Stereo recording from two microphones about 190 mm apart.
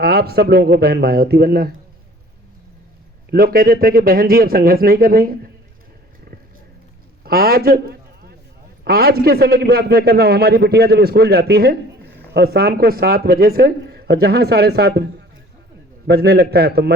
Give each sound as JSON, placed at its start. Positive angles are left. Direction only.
{"t": 0.0, "sound": "a man's voice", "side_deg": -55}
{"t": 3.3, "sound": "speech", "side_deg": -50}
{"t": 7.3, "sound": "a man's voice", "side_deg": -55}
{"t": 16.0, "sound": "a man's voice", "side_deg": -60}